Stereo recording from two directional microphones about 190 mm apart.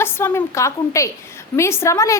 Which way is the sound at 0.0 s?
10° left (ahead or behind).